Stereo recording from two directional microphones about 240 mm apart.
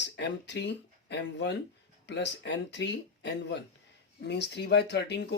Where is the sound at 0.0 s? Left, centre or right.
Left.